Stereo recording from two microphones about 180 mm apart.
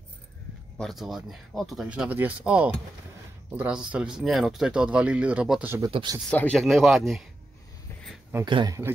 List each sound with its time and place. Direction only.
0.7 s speech: centre (ahead or behind)
5.9 s speech: 30° right (ahead or behind)
6.3 s speech: 5° left (ahead or behind)
8.5 s speech: 25° right (ahead or behind)